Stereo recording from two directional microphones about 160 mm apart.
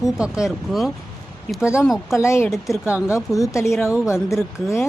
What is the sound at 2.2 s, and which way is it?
Speech, 15° left (ahead or behind).